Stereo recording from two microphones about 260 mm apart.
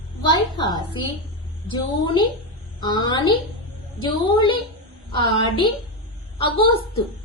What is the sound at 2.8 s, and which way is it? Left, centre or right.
A woman's voice, centre.